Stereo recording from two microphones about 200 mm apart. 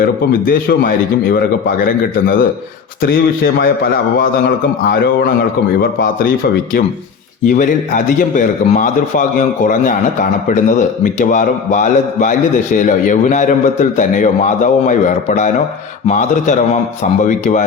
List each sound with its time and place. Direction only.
0.0 s a man's voice: 45° left (ahead or behind)
5.8 s a man's voice: 45° left (ahead or behind)
7.4 s a man's voice: 40° left (ahead or behind)